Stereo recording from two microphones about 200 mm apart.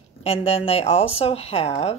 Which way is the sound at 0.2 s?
30° left (ahead or behind).